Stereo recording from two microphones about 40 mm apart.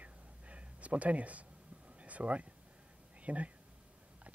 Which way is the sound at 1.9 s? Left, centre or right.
Right.